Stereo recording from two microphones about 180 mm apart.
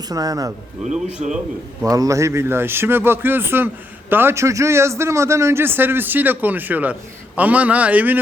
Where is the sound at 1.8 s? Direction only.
20° right (ahead or behind).